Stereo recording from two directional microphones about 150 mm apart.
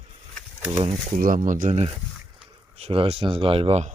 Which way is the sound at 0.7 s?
45° right (ahead or behind).